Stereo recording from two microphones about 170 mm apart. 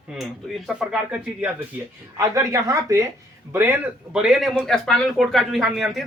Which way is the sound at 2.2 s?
20° right (ahead or behind).